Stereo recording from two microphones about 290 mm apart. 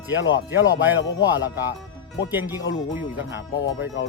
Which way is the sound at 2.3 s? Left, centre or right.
Centre.